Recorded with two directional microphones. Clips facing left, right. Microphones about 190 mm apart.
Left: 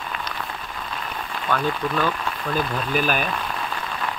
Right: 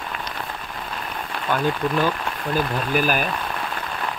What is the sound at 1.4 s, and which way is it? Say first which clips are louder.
Speech: right 2 dB; 15° right (ahead or behind).